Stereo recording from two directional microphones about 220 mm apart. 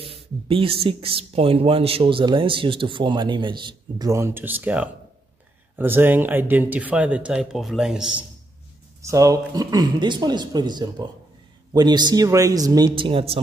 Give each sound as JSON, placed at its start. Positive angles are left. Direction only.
{"t": 0.0, "sound": "a sound", "side_deg": -25}
{"t": 0.8, "sound": "speech", "side_deg": -25}
{"t": 9.0, "sound": "speech", "side_deg": -15}